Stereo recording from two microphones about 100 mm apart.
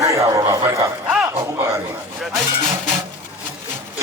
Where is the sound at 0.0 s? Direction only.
30° right (ahead or behind).